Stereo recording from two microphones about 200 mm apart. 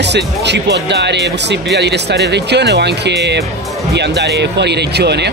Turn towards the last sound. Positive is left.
turn(degrees=-55)  # may be behind; listen again after turning